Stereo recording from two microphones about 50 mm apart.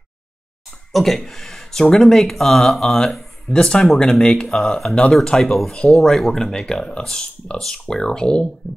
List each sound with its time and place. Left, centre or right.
0.7 s speech: centre
3.5 s speech: centre